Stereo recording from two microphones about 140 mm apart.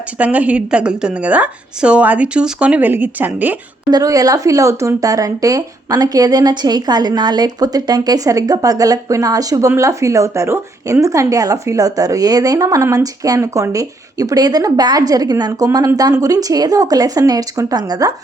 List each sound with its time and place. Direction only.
0.2 s a woman's voice: 10° right (ahead or behind)
3.8 s speech: 25° right (ahead or behind)